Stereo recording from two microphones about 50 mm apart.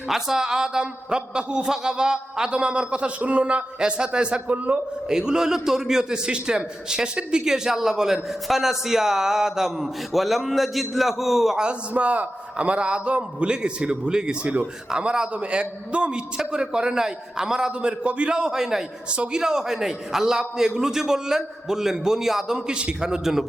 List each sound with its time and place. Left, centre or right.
0.1 s a man's voice: centre
4.5 s a man's voice: right
5.0 s a man's voice: centre
11.5 s a man's voice: right
19.1 s a man's voice: right
19.4 s a man's voice: centre
22.5 s a man's voice: centre